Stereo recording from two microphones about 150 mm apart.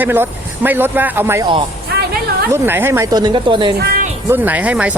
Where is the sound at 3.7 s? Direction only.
85° right.